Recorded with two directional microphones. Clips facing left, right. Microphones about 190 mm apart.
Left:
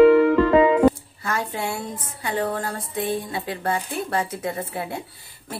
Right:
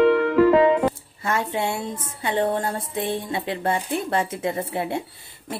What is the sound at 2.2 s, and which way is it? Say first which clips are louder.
Music: right 3 dB; 25° right (ahead or behind).